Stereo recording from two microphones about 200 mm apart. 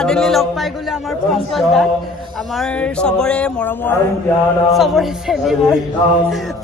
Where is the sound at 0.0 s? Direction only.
5° left (ahead or behind).